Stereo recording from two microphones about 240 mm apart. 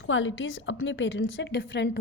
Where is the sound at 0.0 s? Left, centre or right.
Left.